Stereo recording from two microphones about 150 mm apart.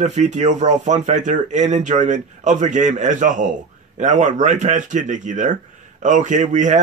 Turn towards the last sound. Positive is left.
turn(degrees=-55)  # may be behind; listen again after turning